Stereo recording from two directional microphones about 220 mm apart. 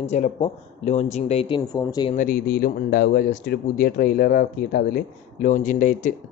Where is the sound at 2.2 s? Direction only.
40° left (ahead or behind).